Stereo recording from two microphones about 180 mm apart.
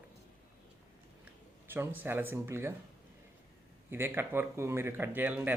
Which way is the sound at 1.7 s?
10° right (ahead or behind).